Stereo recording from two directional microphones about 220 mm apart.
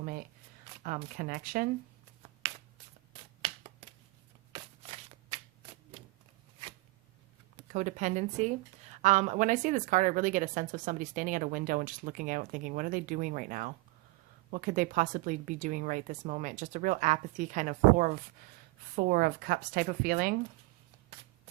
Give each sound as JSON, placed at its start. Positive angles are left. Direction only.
{"t": 1.1, "sound": "a woman's voice", "side_deg": -40}
{"t": 3.1, "sound": "a sound", "side_deg": -25}
{"t": 7.7, "sound": "a woman's voice", "side_deg": -35}